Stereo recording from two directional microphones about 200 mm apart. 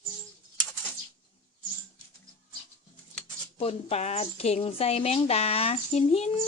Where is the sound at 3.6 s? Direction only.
30° left (ahead or behind).